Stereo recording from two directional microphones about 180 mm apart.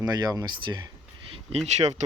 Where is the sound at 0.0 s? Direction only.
20° right (ahead or behind).